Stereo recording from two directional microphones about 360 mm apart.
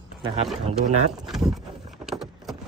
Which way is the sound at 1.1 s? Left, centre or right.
Centre.